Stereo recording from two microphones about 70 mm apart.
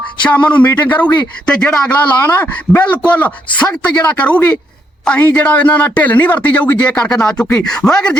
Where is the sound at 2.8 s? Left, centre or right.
Left.